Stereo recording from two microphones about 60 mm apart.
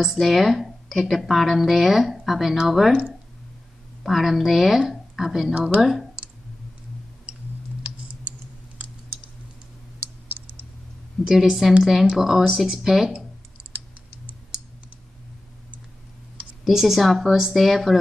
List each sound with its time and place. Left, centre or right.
0.0 s speech: centre
4.0 s speech: centre
5.5 s a woman's voice: right
5.8 s speech: centre
11.2 s speech: centre
16.6 s speech: centre